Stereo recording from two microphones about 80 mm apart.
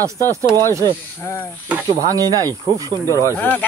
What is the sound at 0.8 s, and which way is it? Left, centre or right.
Speech, left.